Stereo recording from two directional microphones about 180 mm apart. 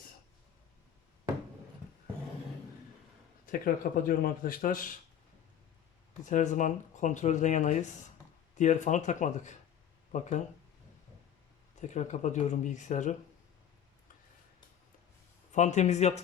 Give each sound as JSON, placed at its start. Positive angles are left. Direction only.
{"t": 3.4, "sound": "speech", "side_deg": 50}
{"t": 6.2, "sound": "speech", "side_deg": 40}
{"t": 11.8, "sound": "speech", "side_deg": 40}
{"t": 15.5, "sound": "speech", "side_deg": 40}